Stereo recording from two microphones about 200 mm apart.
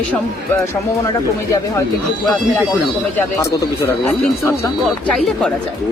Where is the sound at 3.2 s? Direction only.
10° left (ahead or behind).